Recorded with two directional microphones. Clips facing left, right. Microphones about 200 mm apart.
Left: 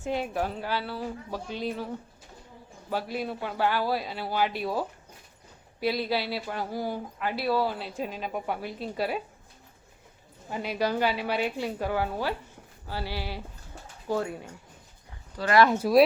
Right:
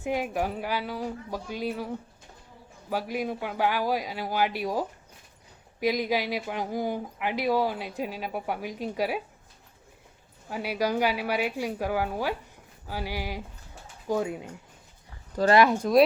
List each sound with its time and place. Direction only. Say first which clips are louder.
0.1 s speech: right 1 dB; 10° right (ahead or behind)
2.9 s speech: right 1 dB; 10° right (ahead or behind)
10.5 s speech: right 1 dB; 10° right (ahead or behind)
15.4 s speech: right 7 dB; 45° right (ahead or behind)
15.7 s speech: even; 5° left (ahead or behind)